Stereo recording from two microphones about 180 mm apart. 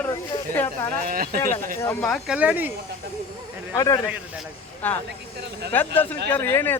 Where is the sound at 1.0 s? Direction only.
55° right (ahead or behind).